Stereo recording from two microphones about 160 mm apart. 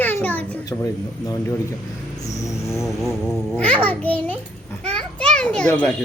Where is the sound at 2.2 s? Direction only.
20° left (ahead or behind).